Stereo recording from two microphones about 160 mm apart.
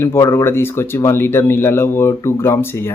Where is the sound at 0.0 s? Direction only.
15° left (ahead or behind).